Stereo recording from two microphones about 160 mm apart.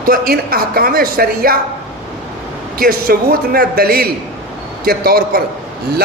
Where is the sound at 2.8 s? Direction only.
65° right (ahead or behind).